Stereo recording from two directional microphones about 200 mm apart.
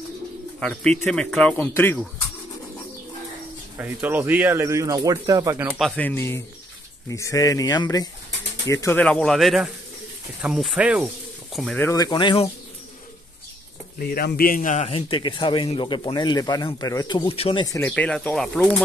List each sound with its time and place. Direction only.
0.6 s speech: 5° left (ahead or behind)
3.7 s speech: 10° right (ahead or behind)
5.8 s speech: 5° left (ahead or behind); by 8.1 s 20° left (ahead or behind)
8.8 s speech: 5° left (ahead or behind)
11.8 s a man's voice: 20° left (ahead or behind)
13.9 s a man's voice: 50° left (ahead or behind); by 17.7 s 25° left (ahead or behind)
17.7 s speech: 10° left (ahead or behind)